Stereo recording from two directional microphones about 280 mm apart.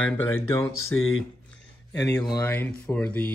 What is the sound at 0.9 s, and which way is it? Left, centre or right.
Speech, left.